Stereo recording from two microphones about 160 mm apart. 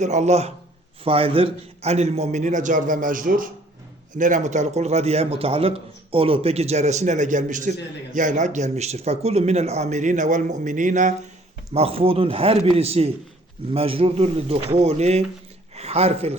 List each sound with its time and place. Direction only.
0.0 s a man's voice: 50° right (ahead or behind)
11.7 s speech: 40° right (ahead or behind)